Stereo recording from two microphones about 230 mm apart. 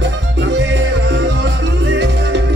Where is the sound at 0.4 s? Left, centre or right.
Right.